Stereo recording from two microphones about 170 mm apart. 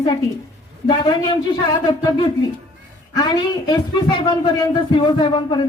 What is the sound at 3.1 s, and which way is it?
A man's voice, 25° left (ahead or behind).